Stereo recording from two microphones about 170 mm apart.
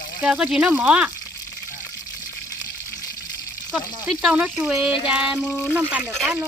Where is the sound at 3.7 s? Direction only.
5° right (ahead or behind).